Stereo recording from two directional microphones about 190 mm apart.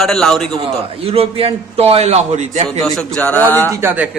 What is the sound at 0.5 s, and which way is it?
A man's voice, 30° right (ahead or behind).